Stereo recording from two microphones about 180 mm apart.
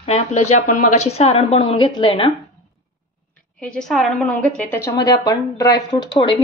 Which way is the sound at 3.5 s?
5° left (ahead or behind).